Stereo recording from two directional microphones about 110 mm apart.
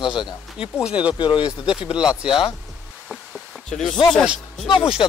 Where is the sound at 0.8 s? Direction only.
10° right (ahead or behind).